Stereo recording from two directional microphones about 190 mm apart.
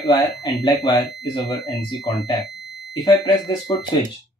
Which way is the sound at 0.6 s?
20° left (ahead or behind).